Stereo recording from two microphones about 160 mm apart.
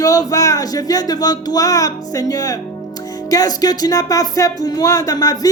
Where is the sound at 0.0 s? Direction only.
20° left (ahead or behind).